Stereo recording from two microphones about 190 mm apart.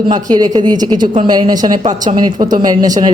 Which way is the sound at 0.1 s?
20° right (ahead or behind).